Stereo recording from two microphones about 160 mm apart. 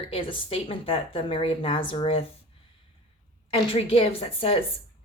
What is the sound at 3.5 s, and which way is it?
Speech, 40° left (ahead or behind).